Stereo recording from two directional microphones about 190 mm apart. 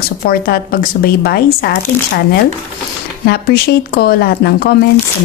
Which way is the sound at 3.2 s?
55° left (ahead or behind).